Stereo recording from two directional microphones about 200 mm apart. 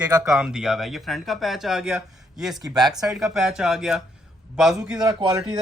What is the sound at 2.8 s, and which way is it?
Speech, 20° right (ahead or behind).